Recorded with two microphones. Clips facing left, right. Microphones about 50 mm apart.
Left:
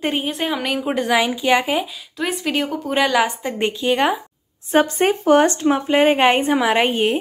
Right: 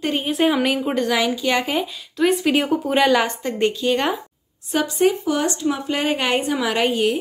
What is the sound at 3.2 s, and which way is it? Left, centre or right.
Speech, centre.